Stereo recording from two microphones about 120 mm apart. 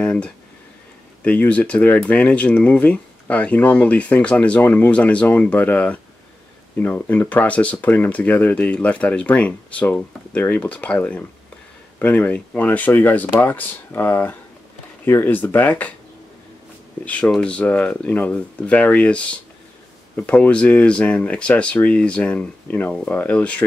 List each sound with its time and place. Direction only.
0.0 s speech: 10° left (ahead or behind)
17.0 s speech: 10° left (ahead or behind)